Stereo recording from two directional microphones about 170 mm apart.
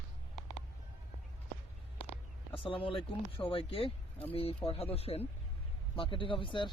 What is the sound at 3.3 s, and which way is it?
Speech, 35° left (ahead or behind).